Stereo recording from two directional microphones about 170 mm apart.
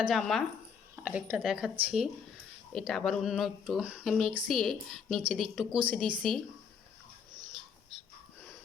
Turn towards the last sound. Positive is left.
turn(degrees=-25)  # may be behind; listen again after turning